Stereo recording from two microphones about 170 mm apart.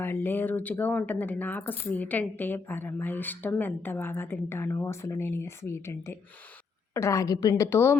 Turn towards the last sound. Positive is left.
turn(degrees=15)  # may be behind; listen again after turning